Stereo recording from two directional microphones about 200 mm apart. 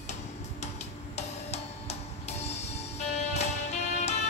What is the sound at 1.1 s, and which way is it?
Music, 35° left (ahead or behind).